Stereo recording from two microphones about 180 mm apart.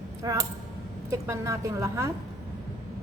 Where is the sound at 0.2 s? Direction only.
20° right (ahead or behind).